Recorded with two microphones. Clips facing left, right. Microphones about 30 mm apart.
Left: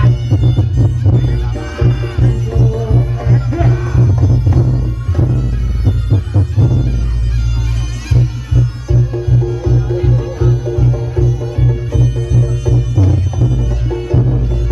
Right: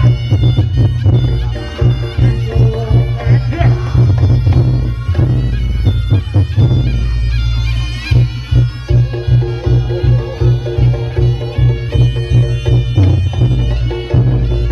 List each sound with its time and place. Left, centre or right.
0.1 s cat: right
1.0 s music: right
1.9 s music: right
8.1 s music: right